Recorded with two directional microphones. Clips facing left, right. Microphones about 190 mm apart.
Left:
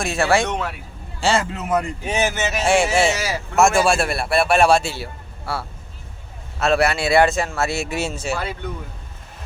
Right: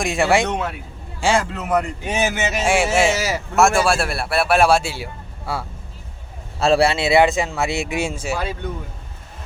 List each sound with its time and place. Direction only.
0.0 s speech: 15° right (ahead or behind)
1.4 s a man's voice: centre (ahead or behind)
6.6 s speech: 30° right (ahead or behind); by 8.5 s 10° right (ahead or behind)